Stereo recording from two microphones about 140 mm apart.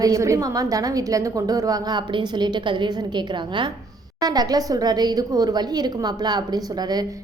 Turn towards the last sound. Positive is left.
turn(degrees=-30)  # may be behind; listen again after turning